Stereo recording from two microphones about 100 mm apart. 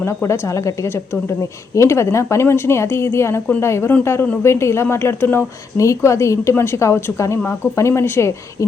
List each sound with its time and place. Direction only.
0.0 s a woman's voice: 25° left (ahead or behind)